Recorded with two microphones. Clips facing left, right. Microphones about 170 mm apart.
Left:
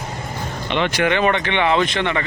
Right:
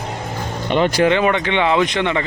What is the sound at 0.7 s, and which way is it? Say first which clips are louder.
Speech: right 4 dB; 40° right (ahead or behind).